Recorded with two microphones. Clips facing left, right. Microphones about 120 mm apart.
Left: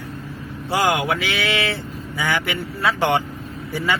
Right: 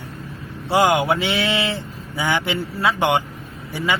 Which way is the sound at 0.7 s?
20° right (ahead or behind).